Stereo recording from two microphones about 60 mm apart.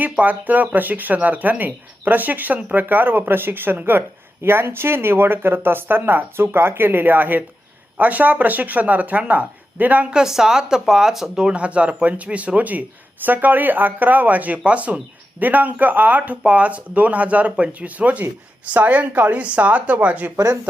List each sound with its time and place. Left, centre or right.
0.0 s speech: right
10.1 s speech: centre